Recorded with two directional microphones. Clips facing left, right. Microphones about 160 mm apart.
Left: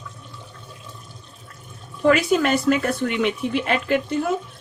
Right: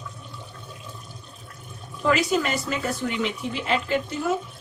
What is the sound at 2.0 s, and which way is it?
Speech, 60° left (ahead or behind).